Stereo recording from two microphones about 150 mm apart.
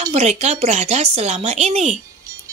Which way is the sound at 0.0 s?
50° right (ahead or behind).